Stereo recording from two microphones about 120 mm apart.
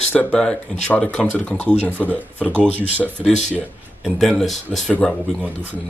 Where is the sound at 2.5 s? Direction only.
15° right (ahead or behind).